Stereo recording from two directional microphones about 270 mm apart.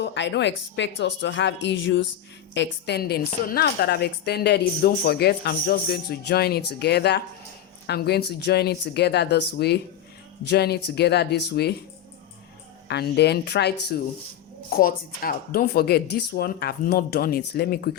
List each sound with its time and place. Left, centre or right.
0.0 s speech: left
12.9 s speech: left